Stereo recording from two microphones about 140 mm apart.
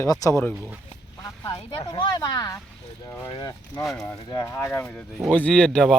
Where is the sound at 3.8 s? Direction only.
5° left (ahead or behind).